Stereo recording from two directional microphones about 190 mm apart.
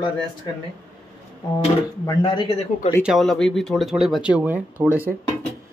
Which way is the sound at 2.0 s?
25° left (ahead or behind).